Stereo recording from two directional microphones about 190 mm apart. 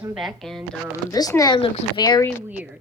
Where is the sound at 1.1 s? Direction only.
20° left (ahead or behind).